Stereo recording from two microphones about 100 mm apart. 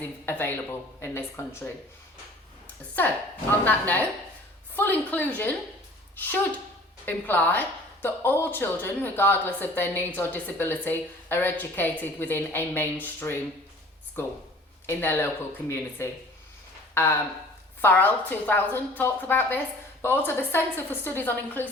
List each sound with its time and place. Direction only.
0.3 s a woman's voice: 20° left (ahead or behind)
3.0 s a woman's voice: 20° left (ahead or behind)
14.8 s a woman's voice: 25° left (ahead or behind)